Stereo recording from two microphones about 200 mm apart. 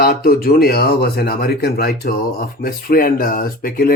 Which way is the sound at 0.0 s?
50° left (ahead or behind).